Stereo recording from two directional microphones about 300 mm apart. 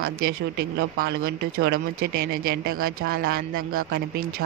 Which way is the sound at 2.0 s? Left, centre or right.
Right.